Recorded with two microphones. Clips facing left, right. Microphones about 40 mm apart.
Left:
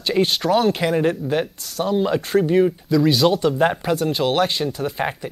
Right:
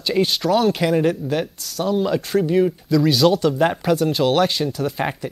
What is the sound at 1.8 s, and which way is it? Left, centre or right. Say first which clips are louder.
Speech: even; centre.